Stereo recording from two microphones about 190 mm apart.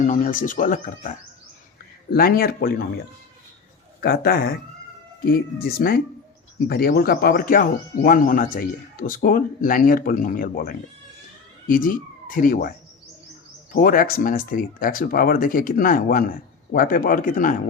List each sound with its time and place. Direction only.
0.0 s speech: 45° left (ahead or behind)
2.1 s speech: 50° left (ahead or behind)
4.0 s speech: 55° left (ahead or behind)
13.7 s speech: 50° left (ahead or behind)